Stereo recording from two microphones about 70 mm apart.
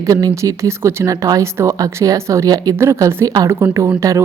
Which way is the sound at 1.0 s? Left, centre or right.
Right.